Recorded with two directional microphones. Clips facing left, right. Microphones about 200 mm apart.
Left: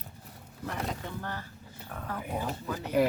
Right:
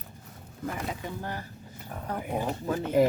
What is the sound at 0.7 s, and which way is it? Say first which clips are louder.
Speech: even; 10° right (ahead or behind).